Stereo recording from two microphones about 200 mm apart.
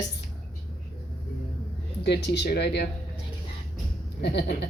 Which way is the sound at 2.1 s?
60° left (ahead or behind).